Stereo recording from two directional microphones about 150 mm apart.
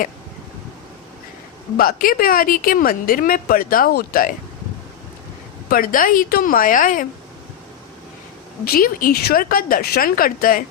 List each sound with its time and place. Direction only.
1.7 s a woman's voice: 75° left (ahead or behind)
5.6 s a woman's voice: 70° left (ahead or behind)
8.6 s a woman's voice: 80° left